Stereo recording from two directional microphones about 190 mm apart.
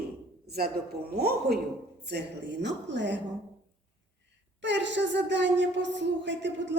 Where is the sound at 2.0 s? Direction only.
65° right (ahead or behind).